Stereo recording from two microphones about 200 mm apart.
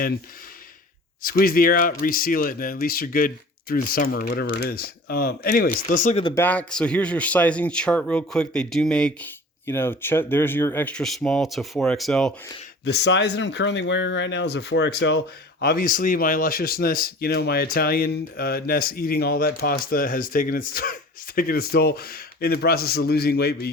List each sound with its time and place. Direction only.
1.2 s speech: 45° left (ahead or behind)
6.2 s a man's voice: 10° left (ahead or behind)
12.8 s speech: 55° left (ahead or behind)